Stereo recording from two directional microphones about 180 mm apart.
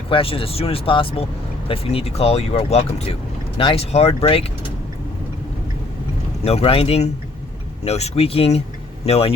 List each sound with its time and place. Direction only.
0.1 s speech: 30° left (ahead or behind)
6.4 s speech: 35° left (ahead or behind)